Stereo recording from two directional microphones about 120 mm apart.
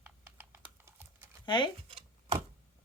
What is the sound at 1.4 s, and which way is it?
Speech, 40° left (ahead or behind).